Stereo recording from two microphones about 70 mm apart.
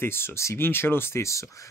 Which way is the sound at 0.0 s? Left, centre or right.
Left.